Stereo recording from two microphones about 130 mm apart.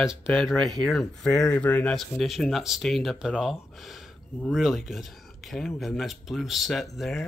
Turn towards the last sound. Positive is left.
turn(degrees=0)  # may be behind; listen again after turning